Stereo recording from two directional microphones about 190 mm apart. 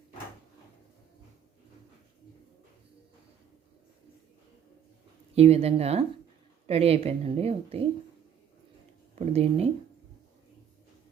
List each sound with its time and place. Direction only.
5.3 s a woman's voice: 35° right (ahead or behind)
9.1 s a woman's voice: 35° right (ahead or behind)